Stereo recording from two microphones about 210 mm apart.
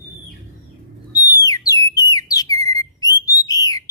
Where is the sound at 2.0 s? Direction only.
15° left (ahead or behind).